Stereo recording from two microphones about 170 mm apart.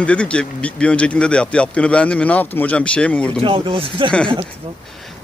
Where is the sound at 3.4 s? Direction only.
30° right (ahead or behind).